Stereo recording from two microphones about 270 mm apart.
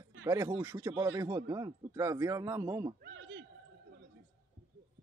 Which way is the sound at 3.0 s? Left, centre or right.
Right.